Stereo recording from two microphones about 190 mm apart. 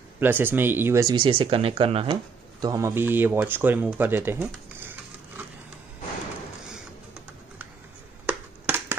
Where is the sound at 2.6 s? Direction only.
15° right (ahead or behind).